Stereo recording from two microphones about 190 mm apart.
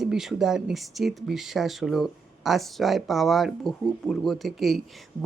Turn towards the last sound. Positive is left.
turn(degrees=0)  # may be behind; listen again after turning